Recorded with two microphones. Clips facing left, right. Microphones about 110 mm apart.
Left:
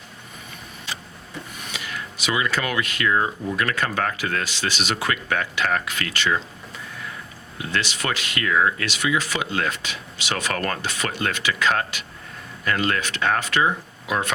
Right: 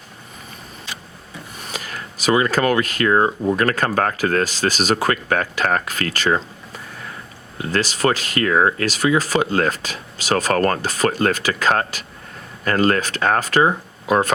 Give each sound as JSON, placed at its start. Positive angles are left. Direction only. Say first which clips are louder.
{"t": 1.6, "sound": "speech", "louder": "right 4 dB", "side_deg": -40}
{"t": 7.6, "sound": "speech", "louder": "right 7 dB", "side_deg": -40}